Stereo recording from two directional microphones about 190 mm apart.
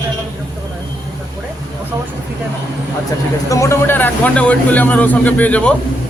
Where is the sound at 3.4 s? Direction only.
15° left (ahead or behind).